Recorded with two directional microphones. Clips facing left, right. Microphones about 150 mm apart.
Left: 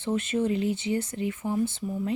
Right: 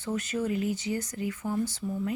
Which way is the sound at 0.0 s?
25° left (ahead or behind).